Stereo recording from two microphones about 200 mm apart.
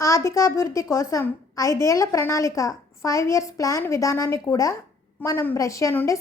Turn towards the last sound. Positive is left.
turn(degrees=15)  # may be behind; listen again after turning